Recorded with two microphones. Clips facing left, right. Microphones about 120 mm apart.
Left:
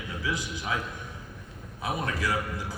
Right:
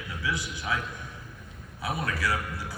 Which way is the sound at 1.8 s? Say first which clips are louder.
Even; 20° left (ahead or behind).